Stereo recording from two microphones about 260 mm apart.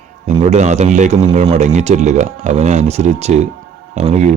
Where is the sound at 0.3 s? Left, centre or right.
Right.